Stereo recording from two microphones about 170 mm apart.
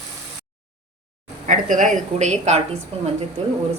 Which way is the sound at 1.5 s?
50° right (ahead or behind).